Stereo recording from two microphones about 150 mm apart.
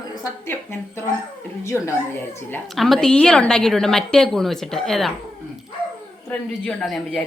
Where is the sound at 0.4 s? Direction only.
15° left (ahead or behind).